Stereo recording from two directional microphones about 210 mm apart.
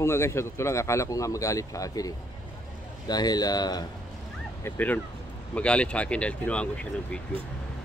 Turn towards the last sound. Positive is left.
turn(degrees=5)  # may be behind; listen again after turning